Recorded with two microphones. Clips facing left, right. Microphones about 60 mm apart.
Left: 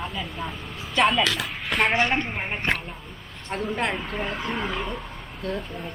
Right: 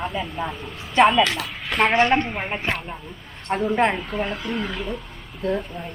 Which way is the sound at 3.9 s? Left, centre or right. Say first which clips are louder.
Right 3 dB; centre.